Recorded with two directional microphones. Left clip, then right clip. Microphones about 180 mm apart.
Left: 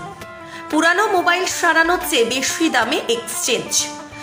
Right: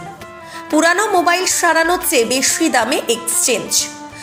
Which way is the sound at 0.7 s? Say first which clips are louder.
Right 2 dB; 10° right (ahead or behind).